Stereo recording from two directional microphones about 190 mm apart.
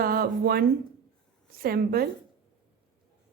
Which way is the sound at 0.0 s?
50° right (ahead or behind).